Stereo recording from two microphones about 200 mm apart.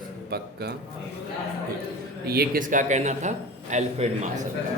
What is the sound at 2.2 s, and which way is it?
A man's voice, 50° right (ahead or behind).